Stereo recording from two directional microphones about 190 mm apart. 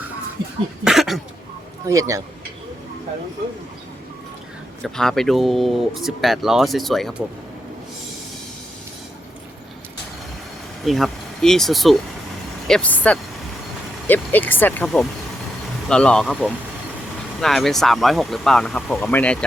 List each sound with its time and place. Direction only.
0.9 s cough: centre (ahead or behind)
1.9 s speech: 15° right (ahead or behind)
4.8 s speech: centre (ahead or behind)
10.8 s speech: centre (ahead or behind)